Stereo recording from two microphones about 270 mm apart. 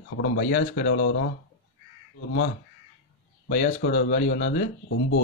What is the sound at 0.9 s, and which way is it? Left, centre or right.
Speech, left.